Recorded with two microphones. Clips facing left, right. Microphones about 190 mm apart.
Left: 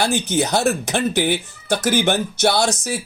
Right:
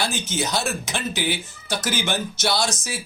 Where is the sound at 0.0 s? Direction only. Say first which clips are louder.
Left 6 dB; 60° left (ahead or behind).